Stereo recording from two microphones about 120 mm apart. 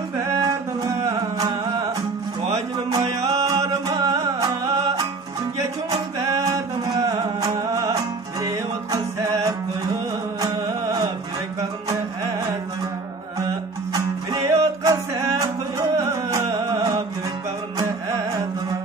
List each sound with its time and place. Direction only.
0.2 s a sound: 30° right (ahead or behind)
3.3 s music: 25° right (ahead or behind)
6.2 s music: 30° right (ahead or behind)
10.4 s music: 40° right (ahead or behind)
13.9 s music: 25° right (ahead or behind)